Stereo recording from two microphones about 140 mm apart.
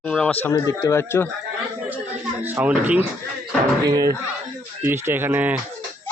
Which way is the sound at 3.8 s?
25° right (ahead or behind).